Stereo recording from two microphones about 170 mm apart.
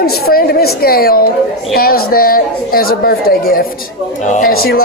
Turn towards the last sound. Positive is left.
turn(degrees=60)  # may be behind; listen again after turning